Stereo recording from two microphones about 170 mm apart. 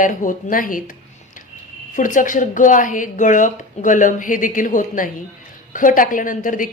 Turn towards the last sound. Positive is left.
turn(degrees=50)  # may be behind; listen again after turning